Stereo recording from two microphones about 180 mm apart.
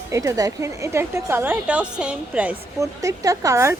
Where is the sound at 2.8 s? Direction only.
20° right (ahead or behind).